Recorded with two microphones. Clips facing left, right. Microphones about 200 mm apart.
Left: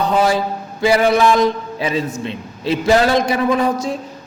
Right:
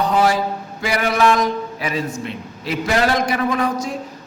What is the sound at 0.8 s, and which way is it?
A man's voice, 30° left (ahead or behind).